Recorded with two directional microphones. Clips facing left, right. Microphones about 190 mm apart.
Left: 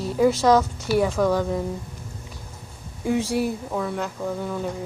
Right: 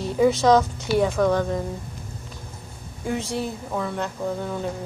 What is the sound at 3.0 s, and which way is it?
Speech, 10° left (ahead or behind).